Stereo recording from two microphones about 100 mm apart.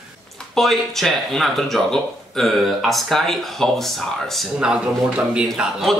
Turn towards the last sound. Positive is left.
turn(degrees=0)  # may be behind; listen again after turning